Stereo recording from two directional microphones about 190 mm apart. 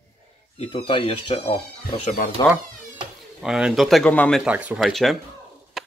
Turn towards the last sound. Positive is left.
turn(degrees=0)  # may be behind; listen again after turning